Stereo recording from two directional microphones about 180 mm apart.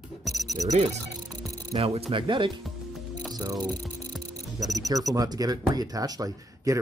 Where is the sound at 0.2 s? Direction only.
Centre (ahead or behind).